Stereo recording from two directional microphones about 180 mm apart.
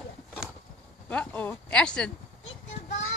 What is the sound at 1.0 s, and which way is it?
Speech, 5° left (ahead or behind).